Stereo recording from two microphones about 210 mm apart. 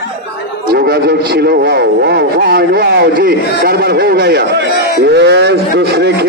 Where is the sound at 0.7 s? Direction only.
50° right (ahead or behind).